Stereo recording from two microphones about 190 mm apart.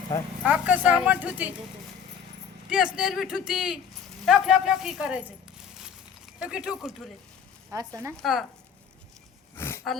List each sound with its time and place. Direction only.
0.4 s speech: 5° right (ahead or behind)
2.6 s speech: 5° right (ahead or behind)
6.4 s speech: 5° right (ahead or behind)
7.7 s speech: 15° right (ahead or behind)
8.1 s speech: centre (ahead or behind)
9.6 s a sound: 15° left (ahead or behind)